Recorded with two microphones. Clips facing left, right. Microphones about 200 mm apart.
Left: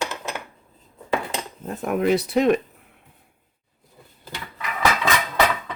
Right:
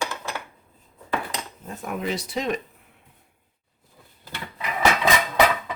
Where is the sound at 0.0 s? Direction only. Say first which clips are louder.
Left 1 dB; 20° left (ahead or behind).